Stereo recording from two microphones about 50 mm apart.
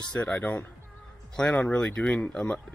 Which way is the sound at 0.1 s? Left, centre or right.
Left.